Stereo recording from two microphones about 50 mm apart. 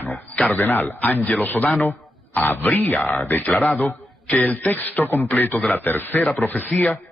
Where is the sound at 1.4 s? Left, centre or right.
Left.